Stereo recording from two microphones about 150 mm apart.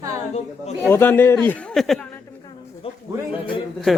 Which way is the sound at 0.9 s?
15° left (ahead or behind).